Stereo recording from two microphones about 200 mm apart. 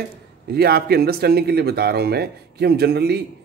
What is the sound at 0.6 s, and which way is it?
Speech, 50° right (ahead or behind).